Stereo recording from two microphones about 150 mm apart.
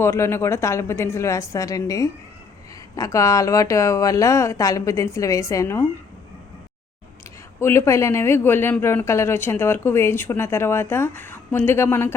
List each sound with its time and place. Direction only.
0.0 s speech: 20° left (ahead or behind)
7.6 s a man's voice: 20° left (ahead or behind)